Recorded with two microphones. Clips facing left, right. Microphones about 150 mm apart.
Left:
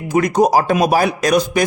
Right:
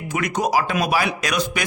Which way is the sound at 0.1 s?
40° left (ahead or behind).